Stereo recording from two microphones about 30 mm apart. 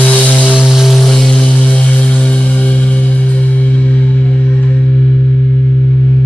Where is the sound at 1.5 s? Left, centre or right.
Left.